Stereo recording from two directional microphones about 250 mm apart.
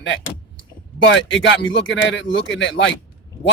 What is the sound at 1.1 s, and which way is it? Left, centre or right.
Speech, left.